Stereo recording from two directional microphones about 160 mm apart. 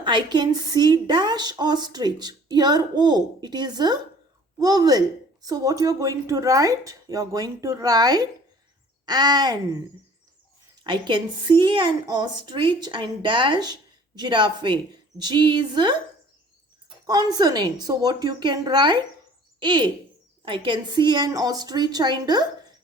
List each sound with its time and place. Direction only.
0.0 s a woman's voice: 30° right (ahead or behind)
10.8 s a woman's voice: 30° right (ahead or behind)
17.3 s a woman's voice: 25° right (ahead or behind)